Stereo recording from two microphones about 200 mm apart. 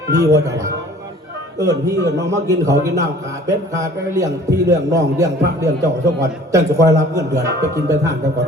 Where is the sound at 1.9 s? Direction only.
15° right (ahead or behind).